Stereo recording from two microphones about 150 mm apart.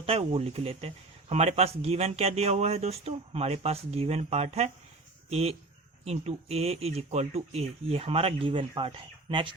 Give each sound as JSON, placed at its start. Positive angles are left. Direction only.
{"t": 0.0, "sound": "speech", "side_deg": -40}